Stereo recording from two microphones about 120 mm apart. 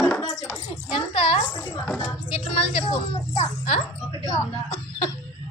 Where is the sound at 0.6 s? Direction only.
45° left (ahead or behind).